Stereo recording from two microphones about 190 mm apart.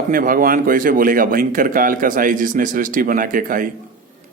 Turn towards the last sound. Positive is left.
turn(degrees=-45)  # may be behind; listen again after turning